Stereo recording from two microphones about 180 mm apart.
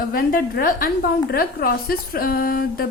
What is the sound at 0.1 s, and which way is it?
A woman's voice, 55° left (ahead or behind).